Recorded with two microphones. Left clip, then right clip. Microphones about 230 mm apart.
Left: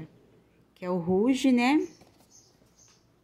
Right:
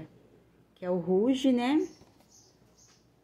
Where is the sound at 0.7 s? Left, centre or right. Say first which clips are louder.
Even; left.